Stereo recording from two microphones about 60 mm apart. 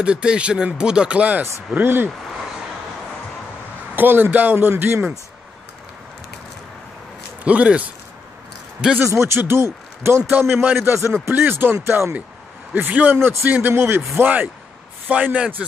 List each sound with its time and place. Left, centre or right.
0.0 s speech: centre
1.8 s a man's voice: right
3.9 s a man's voice: right
7.4 s speech: right
9.0 s speech: right
10.5 s speech: right
10.8 s a man's voice: right
15.0 s speech: right